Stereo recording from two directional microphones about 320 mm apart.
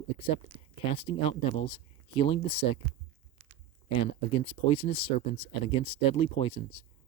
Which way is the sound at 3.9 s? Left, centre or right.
Centre.